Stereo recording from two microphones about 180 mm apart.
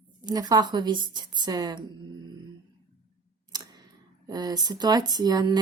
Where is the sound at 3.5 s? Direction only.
25° right (ahead or behind).